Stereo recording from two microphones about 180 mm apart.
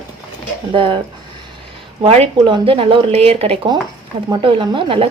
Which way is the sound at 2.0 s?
35° right (ahead or behind).